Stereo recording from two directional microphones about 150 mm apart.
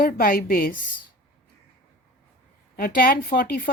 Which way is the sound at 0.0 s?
70° left (ahead or behind).